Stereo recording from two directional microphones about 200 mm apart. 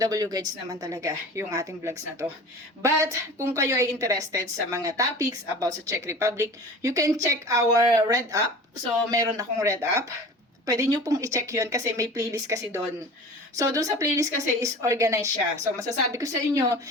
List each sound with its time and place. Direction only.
0.0 s a woman's voice: 20° right (ahead or behind)